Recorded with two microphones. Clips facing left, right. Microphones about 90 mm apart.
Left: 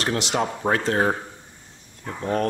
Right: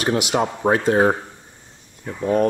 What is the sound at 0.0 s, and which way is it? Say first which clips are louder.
Speech: right 4 dB; 10° right (ahead or behind).